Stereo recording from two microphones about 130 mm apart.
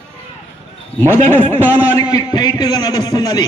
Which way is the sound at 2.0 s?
30° left (ahead or behind).